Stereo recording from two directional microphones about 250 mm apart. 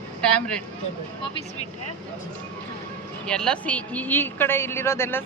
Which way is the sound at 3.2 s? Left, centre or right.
Centre.